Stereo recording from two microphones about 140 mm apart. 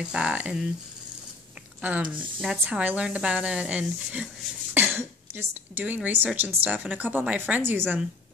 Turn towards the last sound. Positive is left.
turn(degrees=-15)  # may be behind; listen again after turning